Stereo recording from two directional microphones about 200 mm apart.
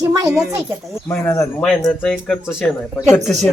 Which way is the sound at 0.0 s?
15° right (ahead or behind).